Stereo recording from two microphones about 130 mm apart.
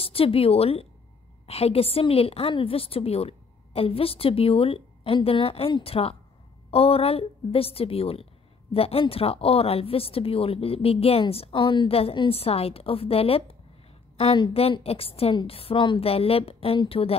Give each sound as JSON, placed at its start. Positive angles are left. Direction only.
{"t": 0.0, "sound": "speech", "side_deg": 45}